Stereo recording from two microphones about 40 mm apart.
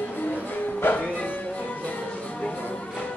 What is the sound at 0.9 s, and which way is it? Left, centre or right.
Music, left.